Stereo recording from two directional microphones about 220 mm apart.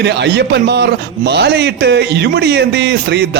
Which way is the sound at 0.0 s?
50° right (ahead or behind).